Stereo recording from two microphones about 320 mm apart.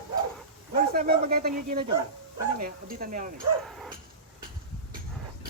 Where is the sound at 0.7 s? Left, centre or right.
Right.